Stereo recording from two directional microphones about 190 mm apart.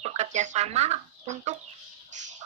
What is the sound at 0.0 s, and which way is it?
Speech, 35° right (ahead or behind).